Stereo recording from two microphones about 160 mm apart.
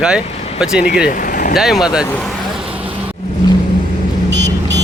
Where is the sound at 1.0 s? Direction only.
55° left (ahead or behind).